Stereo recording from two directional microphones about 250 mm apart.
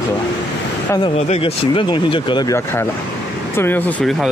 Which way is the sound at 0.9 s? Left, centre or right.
Left.